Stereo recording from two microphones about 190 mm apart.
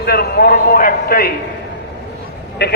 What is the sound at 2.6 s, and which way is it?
Speech, 65° left (ahead or behind).